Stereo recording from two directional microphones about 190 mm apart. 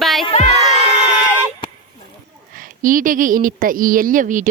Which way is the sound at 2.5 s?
45° right (ahead or behind).